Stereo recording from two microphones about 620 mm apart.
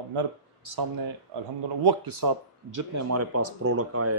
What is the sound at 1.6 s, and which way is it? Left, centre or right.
Speech, right.